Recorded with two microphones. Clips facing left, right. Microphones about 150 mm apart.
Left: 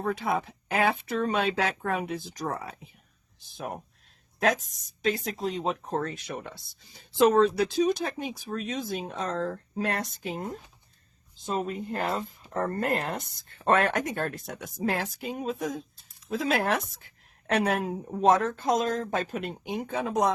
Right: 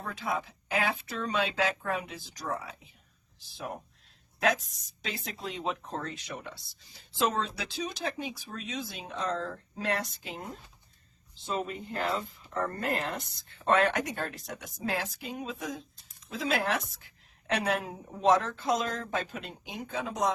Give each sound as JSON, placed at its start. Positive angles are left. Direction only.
{"t": 0.0, "sound": "a woman's voice", "side_deg": 60}